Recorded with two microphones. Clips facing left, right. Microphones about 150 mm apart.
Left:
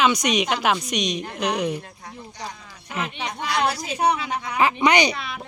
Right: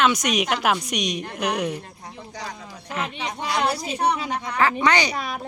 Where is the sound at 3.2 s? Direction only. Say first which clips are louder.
Even; 25° right (ahead or behind).